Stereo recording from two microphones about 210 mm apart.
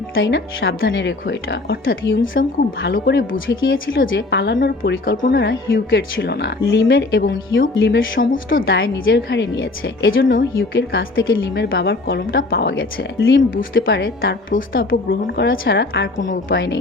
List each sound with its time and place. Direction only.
0.1 s speech: 55° left (ahead or behind)
2.3 s speech: 40° left (ahead or behind); by 3.6 s 65° left (ahead or behind)
3.6 s speech: 45° left (ahead or behind)
4.1 s speech: 55° left (ahead or behind)
5.3 s a woman's voice: 55° left (ahead or behind)